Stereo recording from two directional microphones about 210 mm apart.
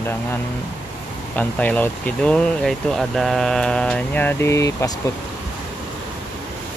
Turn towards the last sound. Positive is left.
turn(degrees=15)  # may be behind; listen again after turning